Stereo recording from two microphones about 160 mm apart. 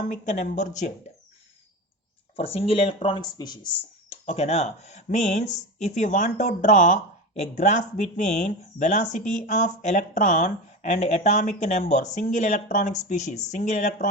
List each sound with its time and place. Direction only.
0.0 s speech: 50° left (ahead or behind)
2.3 s speech: 40° left (ahead or behind)
4.1 s speech: 40° left (ahead or behind)